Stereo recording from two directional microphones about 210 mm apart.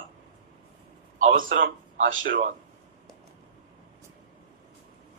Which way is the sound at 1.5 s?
65° right (ahead or behind).